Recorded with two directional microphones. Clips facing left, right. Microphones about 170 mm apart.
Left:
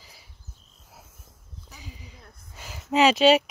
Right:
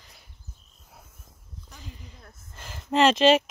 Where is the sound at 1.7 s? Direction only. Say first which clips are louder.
Even; 5° left (ahead or behind).